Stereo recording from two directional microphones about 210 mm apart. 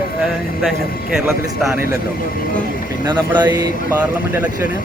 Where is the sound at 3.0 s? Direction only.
20° right (ahead or behind).